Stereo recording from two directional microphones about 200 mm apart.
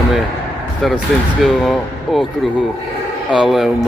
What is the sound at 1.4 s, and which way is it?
Speech, centre (ahead or behind).